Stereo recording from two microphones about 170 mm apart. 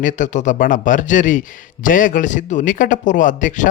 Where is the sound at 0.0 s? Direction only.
50° left (ahead or behind).